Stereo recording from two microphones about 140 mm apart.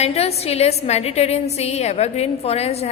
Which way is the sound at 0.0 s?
45° left (ahead or behind).